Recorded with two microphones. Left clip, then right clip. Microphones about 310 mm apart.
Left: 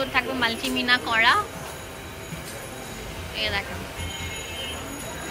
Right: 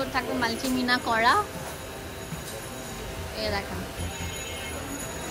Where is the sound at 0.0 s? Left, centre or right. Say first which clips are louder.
Left 4 dB; centre.